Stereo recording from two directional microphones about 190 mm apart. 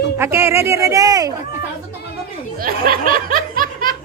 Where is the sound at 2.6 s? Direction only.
50° right (ahead or behind).